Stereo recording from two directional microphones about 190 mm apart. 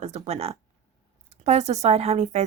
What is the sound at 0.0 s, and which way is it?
Speech, 35° right (ahead or behind).